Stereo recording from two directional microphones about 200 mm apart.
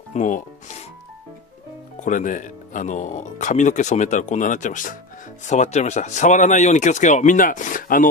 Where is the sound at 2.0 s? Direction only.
40° left (ahead or behind).